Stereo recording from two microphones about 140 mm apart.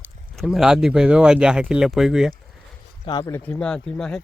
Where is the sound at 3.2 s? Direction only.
15° left (ahead or behind).